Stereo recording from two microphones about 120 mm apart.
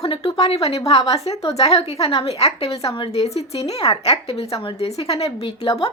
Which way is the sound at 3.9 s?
55° left (ahead or behind).